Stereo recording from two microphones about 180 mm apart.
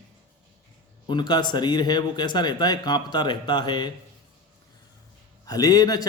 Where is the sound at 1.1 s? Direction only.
25° left (ahead or behind).